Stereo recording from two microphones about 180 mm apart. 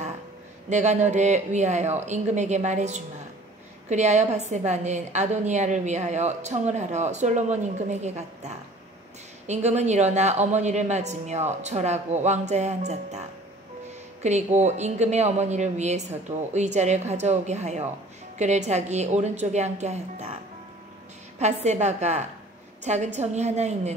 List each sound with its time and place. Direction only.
0.7 s a woman's voice: 40° right (ahead or behind)
14.2 s a woman's voice: 40° right (ahead or behind)
21.4 s a woman's voice: 40° right (ahead or behind)